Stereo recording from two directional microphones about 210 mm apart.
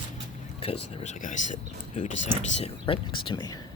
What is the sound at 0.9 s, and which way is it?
Speech, 35° left (ahead or behind).